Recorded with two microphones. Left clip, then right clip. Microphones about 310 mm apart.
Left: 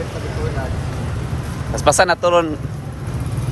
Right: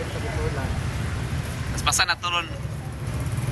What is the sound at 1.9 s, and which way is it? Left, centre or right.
Speech, left.